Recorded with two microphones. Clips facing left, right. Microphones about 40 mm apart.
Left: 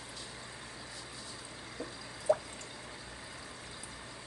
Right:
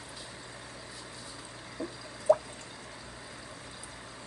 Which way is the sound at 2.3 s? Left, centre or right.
Centre.